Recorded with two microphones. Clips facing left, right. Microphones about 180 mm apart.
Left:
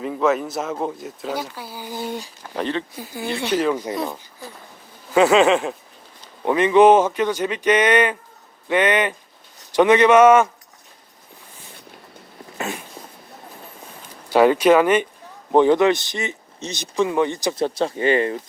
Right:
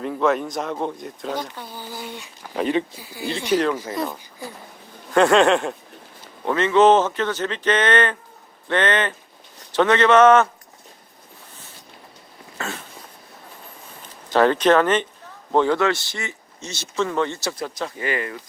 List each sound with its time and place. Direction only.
0.0 s speech: centre (ahead or behind)
2.0 s speech: 40° left (ahead or behind)
2.6 s speech: 10° right (ahead or behind)
3.0 s speech: 50° left (ahead or behind)
3.5 s speech: centre (ahead or behind)
6.4 s speech: 15° left (ahead or behind)
12.5 s a sound: 15° left (ahead or behind)
14.3 s speech: 10° left (ahead or behind)
17.6 s speech: 30° left (ahead or behind)